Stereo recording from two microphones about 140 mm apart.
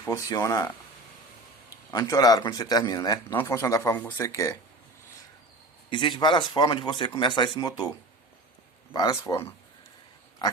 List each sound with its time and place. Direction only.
0.0 s a man's voice: 25° left (ahead or behind)
1.9 s a man's voice: 25° left (ahead or behind)
5.9 s a man's voice: 35° left (ahead or behind)
8.9 s a man's voice: 25° left (ahead or behind)